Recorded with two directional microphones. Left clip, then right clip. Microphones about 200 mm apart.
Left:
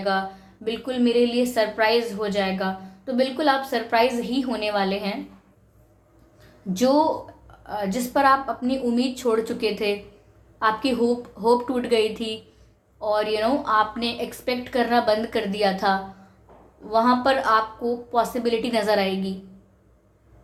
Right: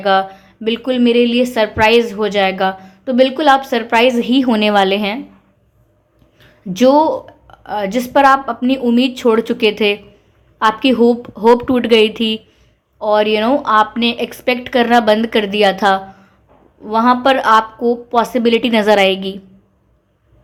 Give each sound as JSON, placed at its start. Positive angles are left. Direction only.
{"t": 0.0, "sound": "a woman's voice", "side_deg": -45}
{"t": 6.7, "sound": "a woman's voice", "side_deg": -35}